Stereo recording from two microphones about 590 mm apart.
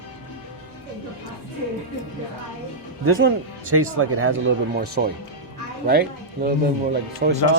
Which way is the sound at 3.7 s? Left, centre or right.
Right.